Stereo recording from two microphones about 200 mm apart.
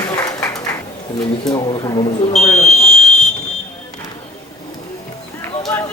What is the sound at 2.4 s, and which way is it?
Smoke detector, centre (ahead or behind).